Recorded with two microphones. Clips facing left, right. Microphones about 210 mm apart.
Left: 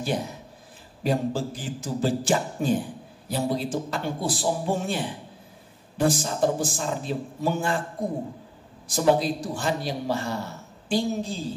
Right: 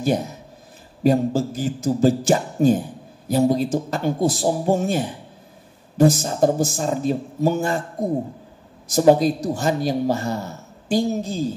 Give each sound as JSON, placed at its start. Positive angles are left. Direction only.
{"t": 1.0, "sound": "speech", "side_deg": -45}
{"t": 8.8, "sound": "speech", "side_deg": -45}